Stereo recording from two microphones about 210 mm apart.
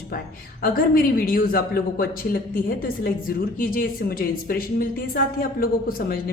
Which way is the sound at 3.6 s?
45° left (ahead or behind).